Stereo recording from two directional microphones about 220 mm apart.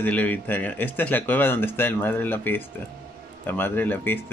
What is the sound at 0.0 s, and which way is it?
Speech, 5° left (ahead or behind).